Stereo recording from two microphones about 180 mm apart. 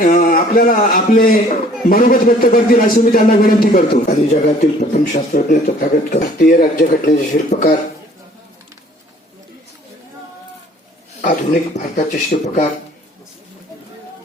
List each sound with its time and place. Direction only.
0.0 s a man's voice: 45° left (ahead or behind)
11.2 s speech: 45° left (ahead or behind)